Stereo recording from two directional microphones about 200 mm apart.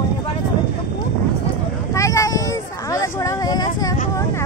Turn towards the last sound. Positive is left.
turn(degrees=20)  # may be behind; listen again after turning